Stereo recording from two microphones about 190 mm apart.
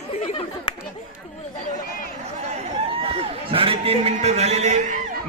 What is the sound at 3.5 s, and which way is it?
A man's voice, 30° right (ahead or behind).